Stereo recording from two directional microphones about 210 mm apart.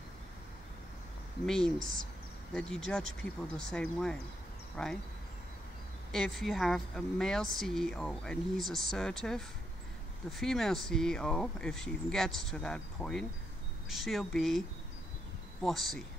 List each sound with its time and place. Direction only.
1.4 s speech: 5° left (ahead or behind)
1.8 s speech: 40° right (ahead or behind)
2.5 s speech: 5° left (ahead or behind)
6.1 s speech: centre (ahead or behind)
15.6 s speech: centre (ahead or behind)